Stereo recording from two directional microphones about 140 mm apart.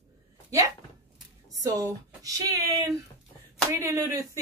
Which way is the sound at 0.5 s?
25° right (ahead or behind).